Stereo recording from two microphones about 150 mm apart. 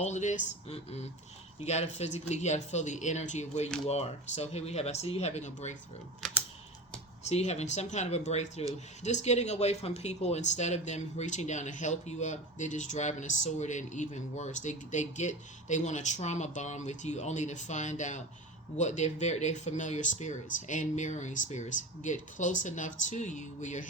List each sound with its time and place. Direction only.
0.0 s speech: 50° left (ahead or behind)
7.3 s speech: 45° left (ahead or behind)